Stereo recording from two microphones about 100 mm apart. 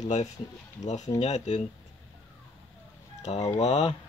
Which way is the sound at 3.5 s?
90° left.